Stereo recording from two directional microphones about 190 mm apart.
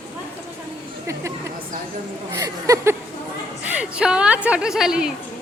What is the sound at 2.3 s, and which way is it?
A woman's voice, 15° right (ahead or behind).